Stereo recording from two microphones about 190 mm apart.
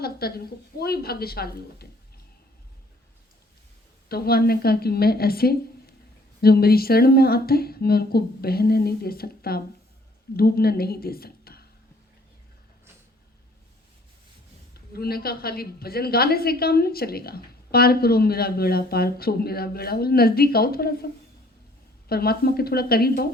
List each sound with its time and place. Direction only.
0.0 s a woman's voice: 55° left (ahead or behind)
4.1 s a woman's voice: 55° left (ahead or behind)
14.7 s a woman's voice: 55° left (ahead or behind)
22.1 s a woman's voice: 55° left (ahead or behind)